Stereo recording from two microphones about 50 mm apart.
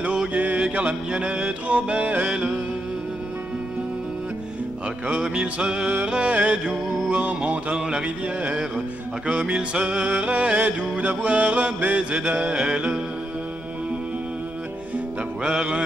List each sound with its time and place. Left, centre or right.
0.3 s music: right
5.2 s music: centre
7.7 s music: centre
15.4 s music: right